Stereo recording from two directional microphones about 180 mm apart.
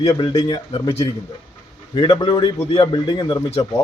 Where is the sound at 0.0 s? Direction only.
20° left (ahead or behind).